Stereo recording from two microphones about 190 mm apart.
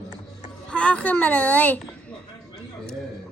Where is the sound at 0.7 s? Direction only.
5° left (ahead or behind).